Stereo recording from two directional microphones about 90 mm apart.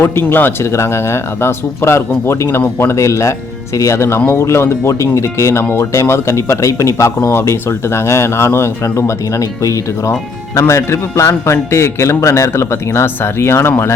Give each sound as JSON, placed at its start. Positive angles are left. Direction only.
{"t": 0.0, "sound": "speech", "side_deg": 25}